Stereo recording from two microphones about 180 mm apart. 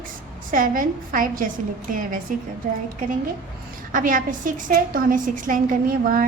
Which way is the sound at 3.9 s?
50° right (ahead or behind).